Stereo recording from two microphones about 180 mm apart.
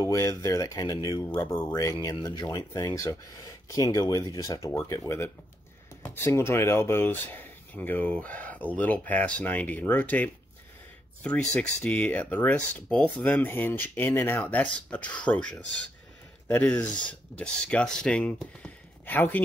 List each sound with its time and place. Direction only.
0.0 s speech: 20° left (ahead or behind)